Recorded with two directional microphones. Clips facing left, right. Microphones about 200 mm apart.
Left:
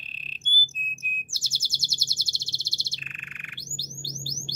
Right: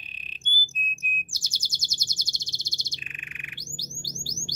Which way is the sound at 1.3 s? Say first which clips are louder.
Left 1 dB; 15° right (ahead or behind).